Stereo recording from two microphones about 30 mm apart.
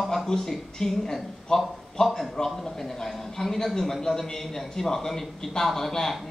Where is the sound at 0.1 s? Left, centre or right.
Centre.